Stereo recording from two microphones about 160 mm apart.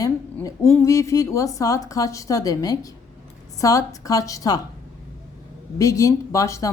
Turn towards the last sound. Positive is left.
turn(degrees=20)  # may be behind; listen again after turning